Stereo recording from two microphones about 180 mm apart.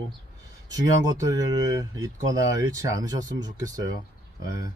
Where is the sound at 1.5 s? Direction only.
20° right (ahead or behind).